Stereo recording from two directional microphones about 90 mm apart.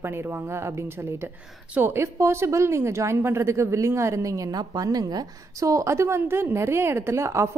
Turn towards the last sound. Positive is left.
turn(degrees=-35)  # may be behind; listen again after turning